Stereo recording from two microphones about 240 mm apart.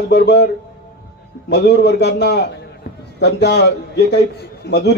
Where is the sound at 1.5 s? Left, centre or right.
Left.